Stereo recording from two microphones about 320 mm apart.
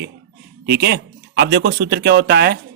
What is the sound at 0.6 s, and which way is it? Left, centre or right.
Speech, right.